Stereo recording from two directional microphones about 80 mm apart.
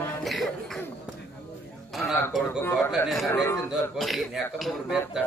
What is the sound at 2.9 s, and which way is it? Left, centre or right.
A man's voice, centre.